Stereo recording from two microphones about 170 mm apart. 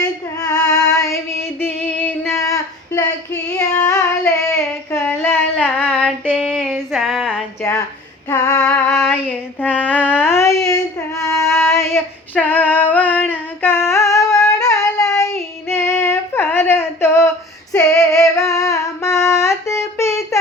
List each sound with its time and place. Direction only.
0.0 s female singing: 20° left (ahead or behind); by 7.4 s centre (ahead or behind)
7.6 s a sound: 15° left (ahead or behind)
8.3 s female singing: 20° left (ahead or behind)
8.6 s music: 15° left (ahead or behind)
9.2 s female singing: 10° left (ahead or behind)
18.1 s humming: 20° left (ahead or behind)